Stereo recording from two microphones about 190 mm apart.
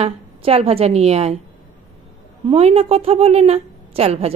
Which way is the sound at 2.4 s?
30° right (ahead or behind).